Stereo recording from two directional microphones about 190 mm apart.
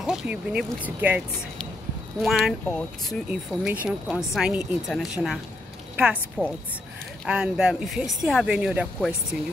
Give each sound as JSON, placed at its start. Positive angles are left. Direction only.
{"t": 0.0, "sound": "speech", "side_deg": -5}
{"t": 2.2, "sound": "a woman's voice", "side_deg": 0}